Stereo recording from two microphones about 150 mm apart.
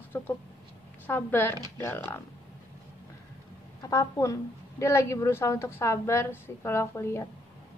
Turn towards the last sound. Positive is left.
turn(degrees=20)  # may be behind; listen again after turning